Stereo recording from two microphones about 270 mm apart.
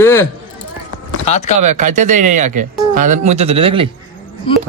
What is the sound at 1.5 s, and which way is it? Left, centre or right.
Speech, right.